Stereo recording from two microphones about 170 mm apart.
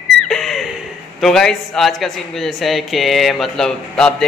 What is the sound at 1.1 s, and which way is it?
A man's voice, centre (ahead or behind).